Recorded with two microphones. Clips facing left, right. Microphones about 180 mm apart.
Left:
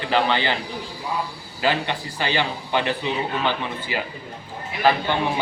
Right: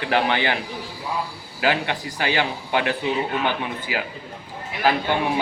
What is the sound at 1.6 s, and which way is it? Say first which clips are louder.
A man's voice: even; 10° right (ahead or behind).